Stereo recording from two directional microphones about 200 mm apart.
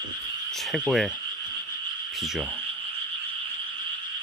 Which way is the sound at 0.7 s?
Centre (ahead or behind).